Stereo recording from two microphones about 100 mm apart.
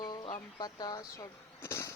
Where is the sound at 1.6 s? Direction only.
30° left (ahead or behind).